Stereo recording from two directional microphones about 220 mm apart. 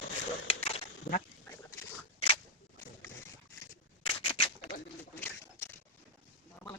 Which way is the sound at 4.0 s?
25° left (ahead or behind).